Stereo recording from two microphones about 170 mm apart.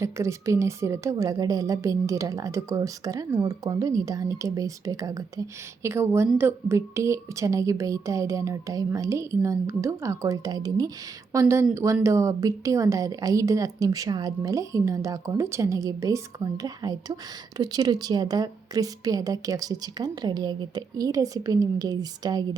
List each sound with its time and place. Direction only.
0.0 s a woman's voice: 15° right (ahead or behind)